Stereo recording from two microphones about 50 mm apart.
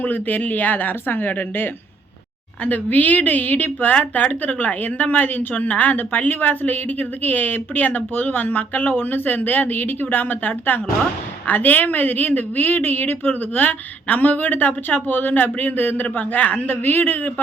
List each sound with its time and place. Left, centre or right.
0.0 s a woman's voice: left